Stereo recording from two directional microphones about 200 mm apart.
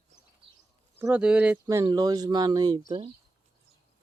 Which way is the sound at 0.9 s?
10° right (ahead or behind).